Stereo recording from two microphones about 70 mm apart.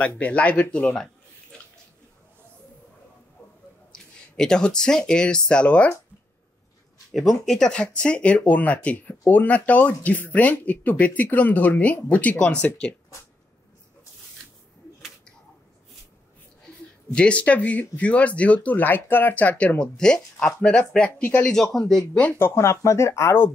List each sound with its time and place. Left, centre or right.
0.2 s speech: centre
3.9 s speech: centre
7.1 s speech: centre
17.1 s speech: centre
21.7 s speech: centre
22.4 s speech: left